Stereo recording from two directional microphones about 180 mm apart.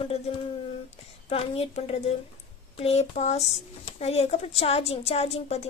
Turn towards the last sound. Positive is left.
turn(degrees=35)  # may be behind; listen again after turning